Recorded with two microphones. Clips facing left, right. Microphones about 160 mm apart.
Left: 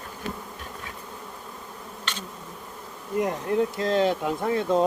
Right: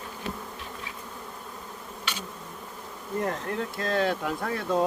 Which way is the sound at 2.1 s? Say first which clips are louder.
Even; 10° right (ahead or behind).